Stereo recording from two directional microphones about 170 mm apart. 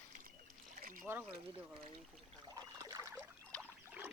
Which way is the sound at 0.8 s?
55° right (ahead or behind).